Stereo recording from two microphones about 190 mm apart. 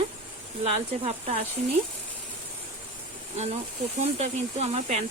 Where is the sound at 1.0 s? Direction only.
30° right (ahead or behind).